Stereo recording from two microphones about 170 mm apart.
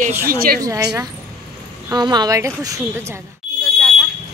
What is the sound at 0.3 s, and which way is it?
Speech, 60° right (ahead or behind).